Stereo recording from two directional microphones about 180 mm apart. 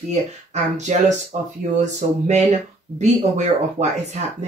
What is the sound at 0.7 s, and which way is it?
Speech, 40° right (ahead or behind).